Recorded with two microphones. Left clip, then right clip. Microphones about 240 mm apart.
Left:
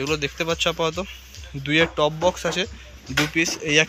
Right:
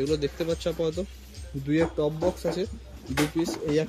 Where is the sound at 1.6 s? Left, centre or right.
Left.